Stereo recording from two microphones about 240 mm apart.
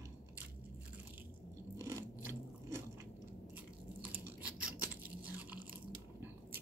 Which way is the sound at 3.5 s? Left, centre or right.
Centre.